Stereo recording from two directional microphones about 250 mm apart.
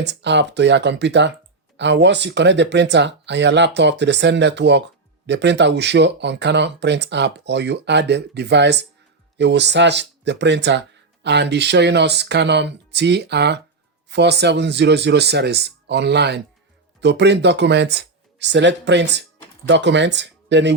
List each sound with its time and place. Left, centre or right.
0.0 s speech: right